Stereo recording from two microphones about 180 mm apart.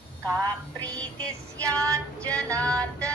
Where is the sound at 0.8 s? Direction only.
5° left (ahead or behind).